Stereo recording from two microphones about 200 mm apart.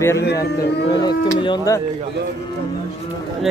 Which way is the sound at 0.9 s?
20° left (ahead or behind).